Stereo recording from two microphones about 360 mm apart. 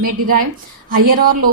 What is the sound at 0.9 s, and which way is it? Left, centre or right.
Speech, right.